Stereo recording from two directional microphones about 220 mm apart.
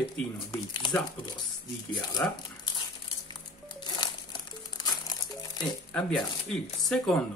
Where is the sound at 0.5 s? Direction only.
20° left (ahead or behind).